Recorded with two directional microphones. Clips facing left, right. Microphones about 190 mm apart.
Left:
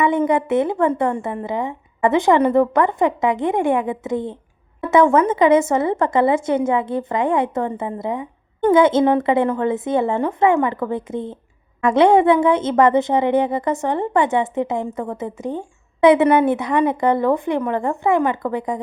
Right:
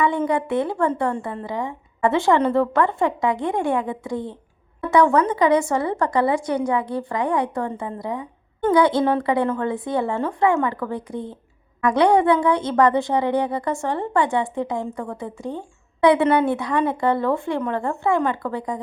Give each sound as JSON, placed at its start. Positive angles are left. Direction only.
{"t": 0.0, "sound": "a woman's voice", "side_deg": 20}